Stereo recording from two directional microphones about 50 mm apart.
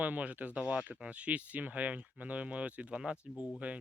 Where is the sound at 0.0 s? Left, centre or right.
Right.